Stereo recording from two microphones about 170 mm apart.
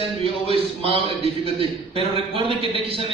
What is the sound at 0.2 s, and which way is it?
A man's voice, 35° right (ahead or behind).